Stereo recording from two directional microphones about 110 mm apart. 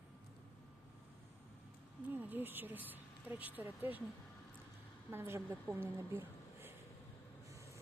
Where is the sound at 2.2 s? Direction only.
15° right (ahead or behind).